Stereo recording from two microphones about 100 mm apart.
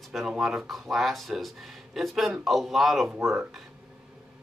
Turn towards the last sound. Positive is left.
turn(degrees=0)  # may be behind; listen again after turning